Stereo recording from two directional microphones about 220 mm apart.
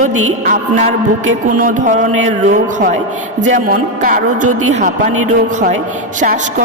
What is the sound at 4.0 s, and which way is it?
Speech, 40° right (ahead or behind).